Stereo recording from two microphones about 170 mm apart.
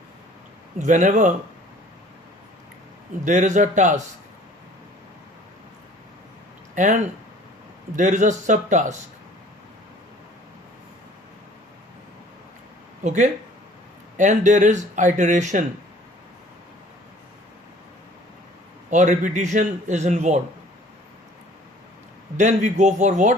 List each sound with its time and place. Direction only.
0.8 s a man's voice: 45° right (ahead or behind)
3.2 s a man's voice: 45° right (ahead or behind)
6.7 s a man's voice: 45° right (ahead or behind)
13.1 s a man's voice: 45° right (ahead or behind)
18.9 s a man's voice: 45° right (ahead or behind)
22.4 s a man's voice: 45° right (ahead or behind)